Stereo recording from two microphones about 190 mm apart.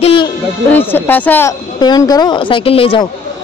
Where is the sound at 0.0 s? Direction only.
25° left (ahead or behind).